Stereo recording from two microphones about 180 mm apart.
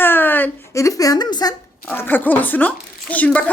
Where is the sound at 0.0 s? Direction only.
10° left (ahead or behind).